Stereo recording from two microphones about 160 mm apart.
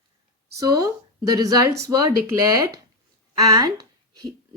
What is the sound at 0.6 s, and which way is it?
A woman's voice, 25° right (ahead or behind).